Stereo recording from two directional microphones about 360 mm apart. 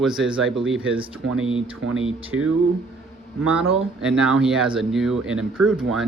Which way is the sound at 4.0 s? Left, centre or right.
Centre.